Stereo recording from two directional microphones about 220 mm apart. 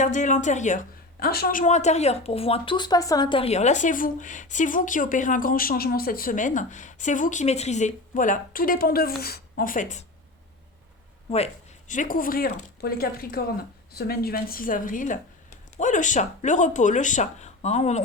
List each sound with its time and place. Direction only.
0.0 s speech: 35° left (ahead or behind)
11.9 s speech: 35° left (ahead or behind)